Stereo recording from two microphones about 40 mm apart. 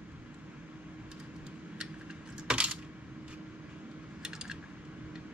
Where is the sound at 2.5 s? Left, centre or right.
Right.